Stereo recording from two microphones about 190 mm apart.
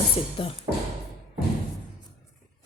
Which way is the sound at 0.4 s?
25° left (ahead or behind).